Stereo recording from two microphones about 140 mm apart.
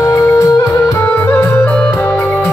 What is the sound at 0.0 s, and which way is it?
Music, 20° left (ahead or behind).